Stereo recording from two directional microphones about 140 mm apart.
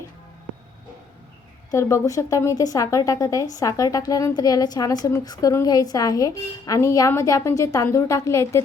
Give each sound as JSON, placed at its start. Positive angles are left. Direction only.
{"t": 1.7, "sound": "a woman's voice", "side_deg": 25}